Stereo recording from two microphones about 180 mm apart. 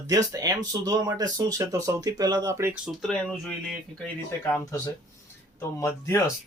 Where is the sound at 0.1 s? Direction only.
20° right (ahead or behind).